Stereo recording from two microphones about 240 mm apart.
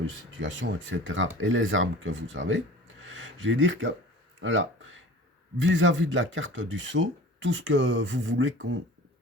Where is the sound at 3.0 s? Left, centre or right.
Right.